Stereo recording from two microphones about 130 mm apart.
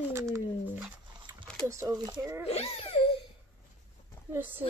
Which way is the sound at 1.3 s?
25° right (ahead or behind).